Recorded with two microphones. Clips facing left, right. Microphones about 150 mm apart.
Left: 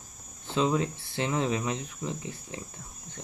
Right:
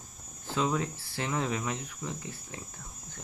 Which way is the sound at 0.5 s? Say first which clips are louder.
Left 3 dB; 20° left (ahead or behind).